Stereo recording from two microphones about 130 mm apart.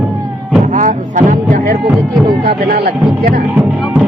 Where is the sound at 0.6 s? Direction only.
75° right (ahead or behind).